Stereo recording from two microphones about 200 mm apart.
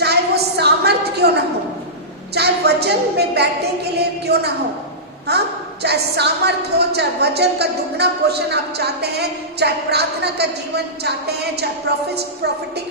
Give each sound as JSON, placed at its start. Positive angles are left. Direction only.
{"t": 0.0, "sound": "a sound", "side_deg": -55}
{"t": 2.3, "sound": "a woman's voice", "side_deg": -55}
{"t": 5.8, "sound": "a woman's voice", "side_deg": -55}